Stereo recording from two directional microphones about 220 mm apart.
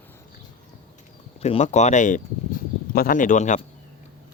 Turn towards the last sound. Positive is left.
turn(degrees=35)  # may be behind; listen again after turning